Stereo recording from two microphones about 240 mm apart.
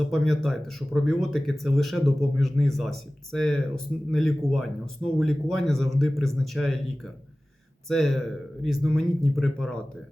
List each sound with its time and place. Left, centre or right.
0.0 s speech: centre
7.9 s speech: centre